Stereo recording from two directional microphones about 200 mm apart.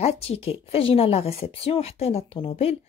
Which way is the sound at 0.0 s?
30° left (ahead or behind).